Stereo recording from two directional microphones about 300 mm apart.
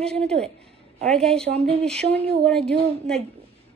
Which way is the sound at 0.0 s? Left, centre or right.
Centre.